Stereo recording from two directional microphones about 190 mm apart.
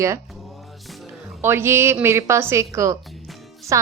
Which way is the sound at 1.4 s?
10° right (ahead or behind).